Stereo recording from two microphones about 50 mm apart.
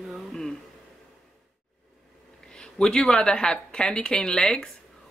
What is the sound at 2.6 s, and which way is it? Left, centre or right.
Speech, centre.